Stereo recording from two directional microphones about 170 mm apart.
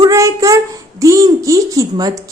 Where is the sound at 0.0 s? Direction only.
20° right (ahead or behind).